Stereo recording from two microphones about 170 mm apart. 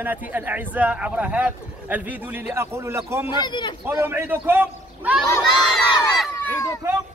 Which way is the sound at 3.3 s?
25° left (ahead or behind).